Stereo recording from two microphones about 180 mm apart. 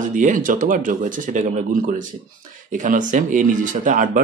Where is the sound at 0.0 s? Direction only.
45° right (ahead or behind).